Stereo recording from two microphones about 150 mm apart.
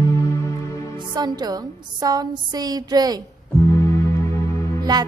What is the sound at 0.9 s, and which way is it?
A woman's voice, 30° right (ahead or behind).